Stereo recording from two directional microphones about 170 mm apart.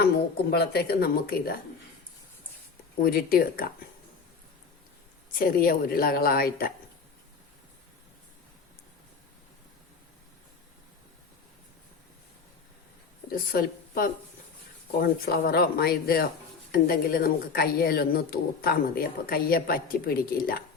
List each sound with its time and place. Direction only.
0.5 s speech: 70° left (ahead or behind)
3.0 s a woman's voice: 60° left (ahead or behind)
5.4 s a woman's voice: 55° left (ahead or behind)
13.3 s a woman's voice: 60° left (ahead or behind)
14.9 s a woman's voice: 70° left (ahead or behind)